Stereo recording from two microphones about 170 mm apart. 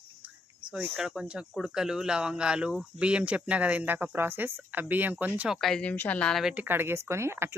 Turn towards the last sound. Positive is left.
turn(degrees=-15)  # may be behind; listen again after turning